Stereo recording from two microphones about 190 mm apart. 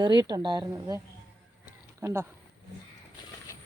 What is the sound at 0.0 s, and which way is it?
A woman's voice, 25° right (ahead or behind).